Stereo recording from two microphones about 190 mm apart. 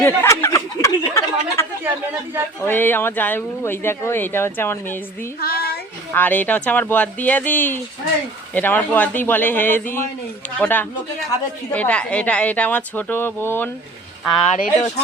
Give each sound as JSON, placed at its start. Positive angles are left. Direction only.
{"t": 0.0, "sound": "a sound", "side_deg": 15}
{"t": 2.6, "sound": "speech", "side_deg": 10}
{"t": 5.4, "sound": "speech", "side_deg": 50}
{"t": 6.1, "sound": "speech", "side_deg": 10}
{"t": 14.5, "sound": "speech", "side_deg": 35}